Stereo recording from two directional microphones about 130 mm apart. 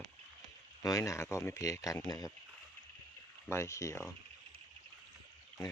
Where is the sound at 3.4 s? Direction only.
20° left (ahead or behind).